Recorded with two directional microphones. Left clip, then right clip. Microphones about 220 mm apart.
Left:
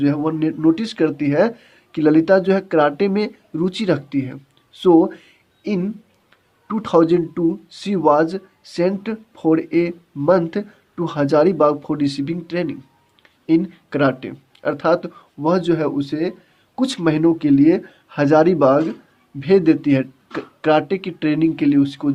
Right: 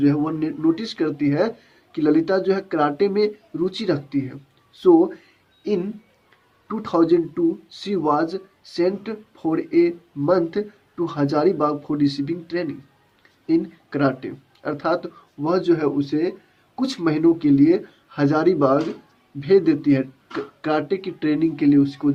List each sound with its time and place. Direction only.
0.0 s speech: 50° left (ahead or behind)